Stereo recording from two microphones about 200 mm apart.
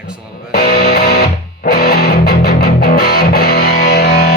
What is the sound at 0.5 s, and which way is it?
Music, 55° left (ahead or behind).